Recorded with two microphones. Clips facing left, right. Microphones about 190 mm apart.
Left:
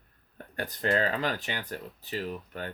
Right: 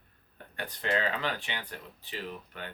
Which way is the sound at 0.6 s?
40° left (ahead or behind).